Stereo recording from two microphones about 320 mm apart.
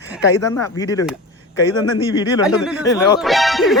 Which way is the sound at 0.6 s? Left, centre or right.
Centre.